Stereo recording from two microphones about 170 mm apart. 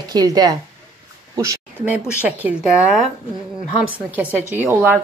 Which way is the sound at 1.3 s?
20° right (ahead or behind).